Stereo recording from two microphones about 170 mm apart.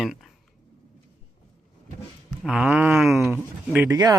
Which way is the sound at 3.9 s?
20° right (ahead or behind).